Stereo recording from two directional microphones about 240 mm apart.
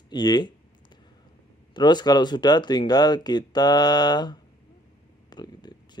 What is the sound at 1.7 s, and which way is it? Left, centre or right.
Speech, centre.